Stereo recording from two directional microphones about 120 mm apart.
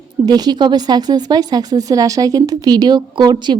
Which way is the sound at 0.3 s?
35° right (ahead or behind).